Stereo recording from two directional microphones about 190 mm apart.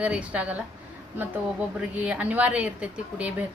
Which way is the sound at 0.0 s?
5° right (ahead or behind).